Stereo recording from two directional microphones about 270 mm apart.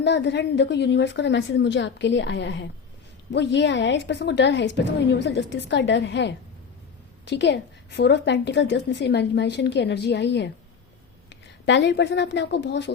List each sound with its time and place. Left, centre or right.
0.0 s a woman's voice: left